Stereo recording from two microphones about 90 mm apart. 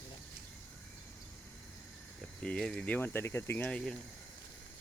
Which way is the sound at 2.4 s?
10° left (ahead or behind).